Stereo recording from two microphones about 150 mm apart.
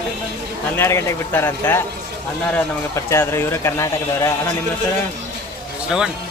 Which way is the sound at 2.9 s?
20° left (ahead or behind).